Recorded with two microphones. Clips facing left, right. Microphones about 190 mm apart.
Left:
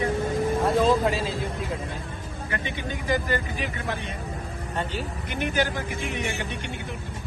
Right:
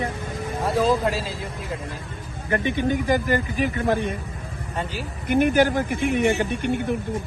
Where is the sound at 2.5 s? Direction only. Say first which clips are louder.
Right 10 dB; 50° right (ahead or behind).